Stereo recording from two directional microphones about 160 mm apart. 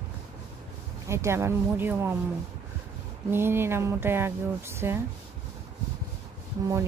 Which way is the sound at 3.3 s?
15° right (ahead or behind).